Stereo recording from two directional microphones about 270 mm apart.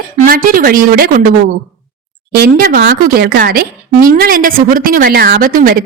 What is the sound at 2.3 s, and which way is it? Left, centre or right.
A woman's voice, right.